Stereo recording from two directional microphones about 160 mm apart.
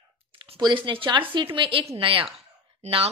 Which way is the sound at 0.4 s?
30° right (ahead or behind).